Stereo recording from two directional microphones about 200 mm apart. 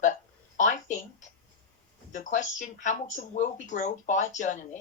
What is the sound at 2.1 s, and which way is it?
Speech, 40° left (ahead or behind).